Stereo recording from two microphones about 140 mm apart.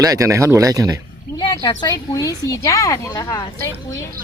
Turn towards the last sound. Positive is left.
turn(degrees=25)  # may be behind; listen again after turning